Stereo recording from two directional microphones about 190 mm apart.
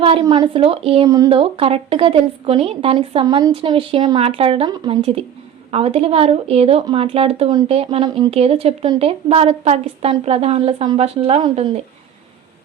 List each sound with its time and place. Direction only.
0.0 s a woman's voice: 25° right (ahead or behind)